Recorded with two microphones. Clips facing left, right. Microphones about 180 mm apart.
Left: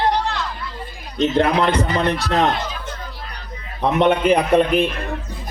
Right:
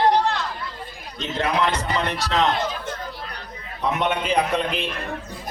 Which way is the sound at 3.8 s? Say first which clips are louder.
Left 7 dB; 55° left (ahead or behind).